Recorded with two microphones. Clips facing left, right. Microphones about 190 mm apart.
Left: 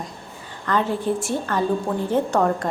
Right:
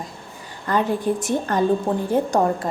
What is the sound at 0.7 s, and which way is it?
A woman's voice, 15° right (ahead or behind).